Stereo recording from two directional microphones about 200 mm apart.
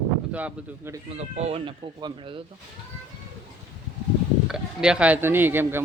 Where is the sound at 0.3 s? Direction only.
5° right (ahead or behind).